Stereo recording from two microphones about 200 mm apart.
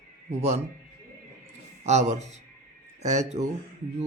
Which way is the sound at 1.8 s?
35° right (ahead or behind).